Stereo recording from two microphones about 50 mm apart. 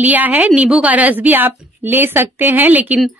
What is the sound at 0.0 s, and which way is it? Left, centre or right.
A woman's voice, right.